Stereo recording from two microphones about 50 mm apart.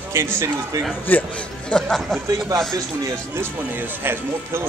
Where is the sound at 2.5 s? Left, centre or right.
Right.